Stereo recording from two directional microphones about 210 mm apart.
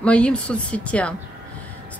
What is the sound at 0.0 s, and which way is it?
Speech, 5° left (ahead or behind).